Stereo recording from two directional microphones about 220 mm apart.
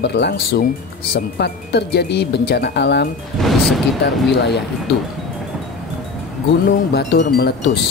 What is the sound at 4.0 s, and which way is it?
Speech, 50° left (ahead or behind).